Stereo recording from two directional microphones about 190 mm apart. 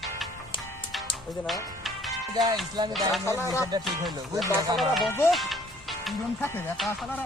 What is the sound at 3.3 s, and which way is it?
Music, 15° left (ahead or behind).